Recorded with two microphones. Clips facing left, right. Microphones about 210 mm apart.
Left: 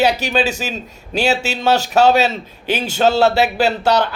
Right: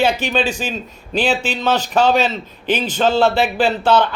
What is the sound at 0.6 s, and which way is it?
Speech, 5° left (ahead or behind).